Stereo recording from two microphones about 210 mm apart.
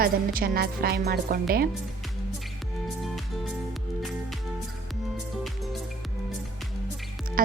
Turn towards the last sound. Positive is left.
turn(degrees=-40)  # may be behind; listen again after turning